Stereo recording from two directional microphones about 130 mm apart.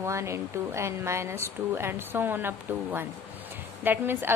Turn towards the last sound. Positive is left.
turn(degrees=-15)  # may be behind; listen again after turning